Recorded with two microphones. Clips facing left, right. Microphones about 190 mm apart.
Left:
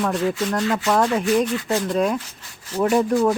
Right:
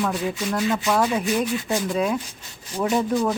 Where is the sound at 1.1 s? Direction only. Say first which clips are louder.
Left 3 dB; 10° right (ahead or behind).